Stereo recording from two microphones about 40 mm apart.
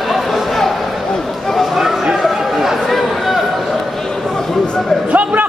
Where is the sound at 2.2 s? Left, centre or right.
Centre.